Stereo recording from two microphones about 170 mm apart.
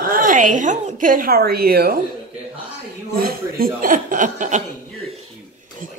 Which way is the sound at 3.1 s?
60° right (ahead or behind).